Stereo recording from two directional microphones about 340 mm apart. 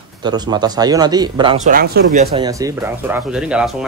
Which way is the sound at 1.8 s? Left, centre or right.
Right.